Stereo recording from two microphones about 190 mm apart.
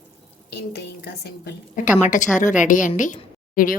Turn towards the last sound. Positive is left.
turn(degrees=45)  # may be behind; listen again after turning